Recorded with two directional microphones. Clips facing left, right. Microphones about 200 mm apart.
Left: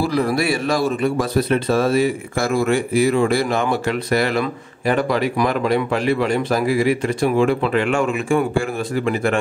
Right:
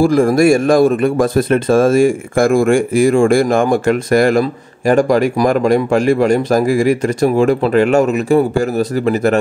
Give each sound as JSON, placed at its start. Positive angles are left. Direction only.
{"t": 0.0, "sound": "speech", "side_deg": -45}